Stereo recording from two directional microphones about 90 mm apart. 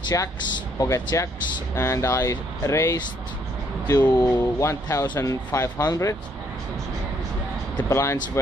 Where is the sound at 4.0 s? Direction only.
45° left (ahead or behind).